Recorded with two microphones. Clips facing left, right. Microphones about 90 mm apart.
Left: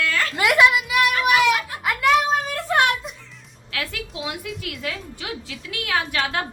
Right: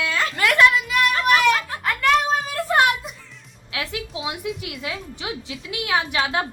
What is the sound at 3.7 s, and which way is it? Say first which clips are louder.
Music: right 1 dB; 20° right (ahead or behind).